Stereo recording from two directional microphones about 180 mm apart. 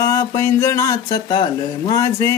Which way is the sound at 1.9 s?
20° left (ahead or behind).